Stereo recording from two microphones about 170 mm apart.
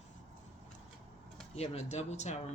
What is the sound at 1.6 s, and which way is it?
Speech, 40° left (ahead or behind).